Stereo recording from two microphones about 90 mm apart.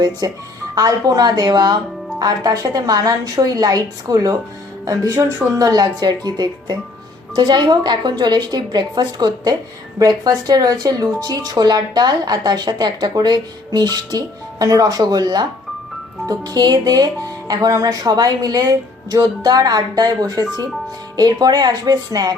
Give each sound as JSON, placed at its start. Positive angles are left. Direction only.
{"t": 0.2, "sound": "speech", "side_deg": -50}